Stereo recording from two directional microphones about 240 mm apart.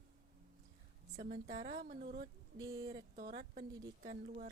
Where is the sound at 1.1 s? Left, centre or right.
Right.